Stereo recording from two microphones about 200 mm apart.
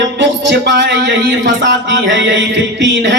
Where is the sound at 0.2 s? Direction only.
60° right (ahead or behind).